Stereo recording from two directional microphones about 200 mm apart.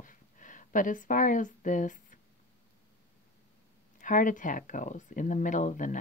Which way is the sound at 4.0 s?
40° left (ahead or behind).